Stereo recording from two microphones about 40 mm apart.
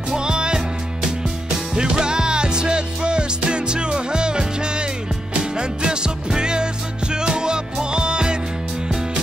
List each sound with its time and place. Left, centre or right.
0.1 s music: right
1.8 s music: right